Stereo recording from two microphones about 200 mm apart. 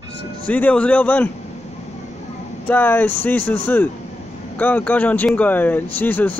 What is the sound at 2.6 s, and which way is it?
Speech, 10° left (ahead or behind).